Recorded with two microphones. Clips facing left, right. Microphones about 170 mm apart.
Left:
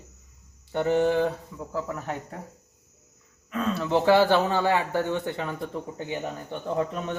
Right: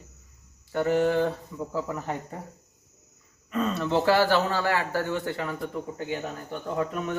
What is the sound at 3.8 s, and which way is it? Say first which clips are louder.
Speech: left 3 dB; 15° left (ahead or behind).